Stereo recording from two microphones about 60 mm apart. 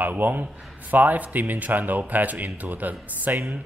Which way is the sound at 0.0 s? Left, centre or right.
Right.